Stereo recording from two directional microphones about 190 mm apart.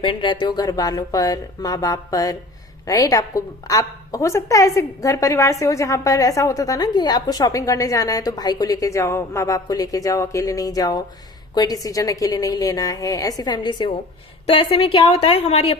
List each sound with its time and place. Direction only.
0.0 s a woman's voice: 25° left (ahead or behind)